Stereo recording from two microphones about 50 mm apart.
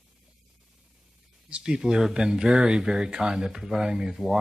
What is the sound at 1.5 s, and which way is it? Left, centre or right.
Speech, centre.